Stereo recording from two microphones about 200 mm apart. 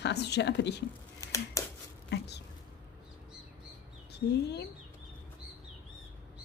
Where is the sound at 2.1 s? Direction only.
60° left (ahead or behind).